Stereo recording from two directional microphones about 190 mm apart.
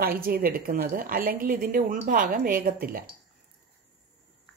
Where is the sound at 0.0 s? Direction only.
50° right (ahead or behind).